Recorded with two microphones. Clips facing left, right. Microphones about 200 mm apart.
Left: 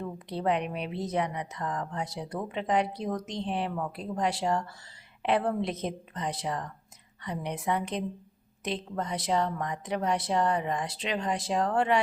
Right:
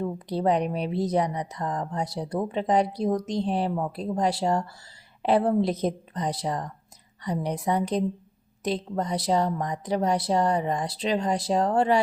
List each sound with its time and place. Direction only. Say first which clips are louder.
0.0 s speech: right 5 dB; 35° right (ahead or behind)